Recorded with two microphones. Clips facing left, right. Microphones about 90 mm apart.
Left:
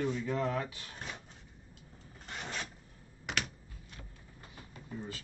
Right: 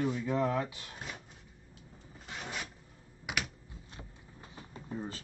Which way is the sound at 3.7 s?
20° right (ahead or behind).